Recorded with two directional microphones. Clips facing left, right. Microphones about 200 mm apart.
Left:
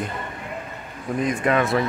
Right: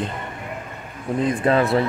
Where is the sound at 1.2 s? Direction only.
30° right (ahead or behind).